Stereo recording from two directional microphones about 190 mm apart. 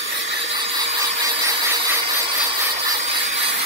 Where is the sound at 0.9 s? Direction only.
20° right (ahead or behind).